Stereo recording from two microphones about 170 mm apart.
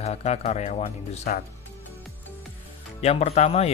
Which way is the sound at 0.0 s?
40° left (ahead or behind).